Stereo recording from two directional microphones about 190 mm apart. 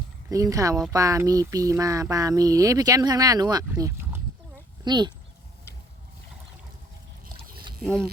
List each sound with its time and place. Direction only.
0.3 s speech: 20° right (ahead or behind)